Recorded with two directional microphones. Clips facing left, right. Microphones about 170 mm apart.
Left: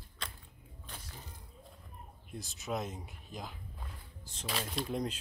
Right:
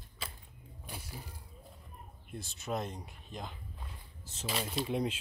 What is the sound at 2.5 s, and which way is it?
Speech, centre (ahead or behind).